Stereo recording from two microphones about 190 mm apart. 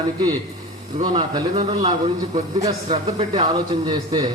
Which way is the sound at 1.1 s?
20° right (ahead or behind).